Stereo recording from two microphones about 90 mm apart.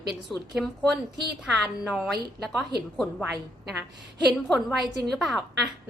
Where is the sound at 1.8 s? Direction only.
5° right (ahead or behind).